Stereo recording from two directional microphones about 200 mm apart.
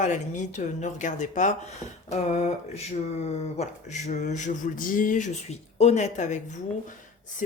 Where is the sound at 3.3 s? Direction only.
35° left (ahead or behind).